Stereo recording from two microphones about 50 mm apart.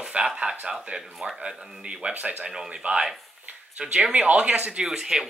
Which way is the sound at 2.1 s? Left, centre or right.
Right.